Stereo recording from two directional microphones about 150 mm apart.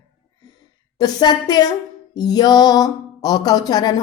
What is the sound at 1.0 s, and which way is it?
A woman's voice, 25° left (ahead or behind).